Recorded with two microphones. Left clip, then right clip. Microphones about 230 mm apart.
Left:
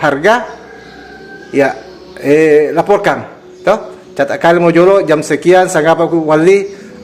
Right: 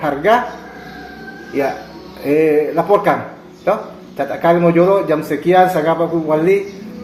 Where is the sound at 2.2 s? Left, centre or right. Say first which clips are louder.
Left 6 dB; left.